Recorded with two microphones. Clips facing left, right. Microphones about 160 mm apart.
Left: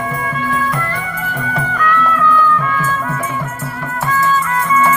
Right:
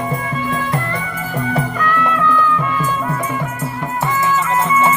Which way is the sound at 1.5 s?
25° right (ahead or behind).